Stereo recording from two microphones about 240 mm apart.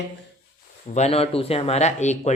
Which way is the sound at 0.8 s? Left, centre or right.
Left.